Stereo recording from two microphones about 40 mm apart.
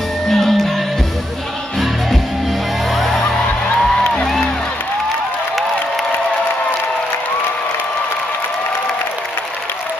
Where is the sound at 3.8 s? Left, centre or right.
Centre.